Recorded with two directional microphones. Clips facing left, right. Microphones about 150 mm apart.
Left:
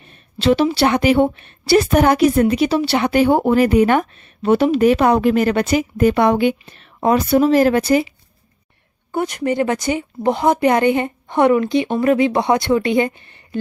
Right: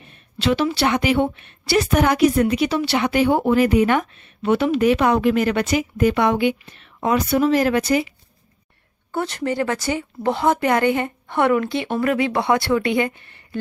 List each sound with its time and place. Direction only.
0.4 s a woman's voice: 35° left (ahead or behind)
9.1 s a woman's voice: 15° left (ahead or behind)